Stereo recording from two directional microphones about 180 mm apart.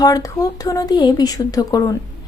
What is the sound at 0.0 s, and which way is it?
Speech, 20° left (ahead or behind).